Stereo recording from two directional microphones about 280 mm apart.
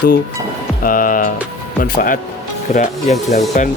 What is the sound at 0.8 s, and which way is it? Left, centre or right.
Speech, left.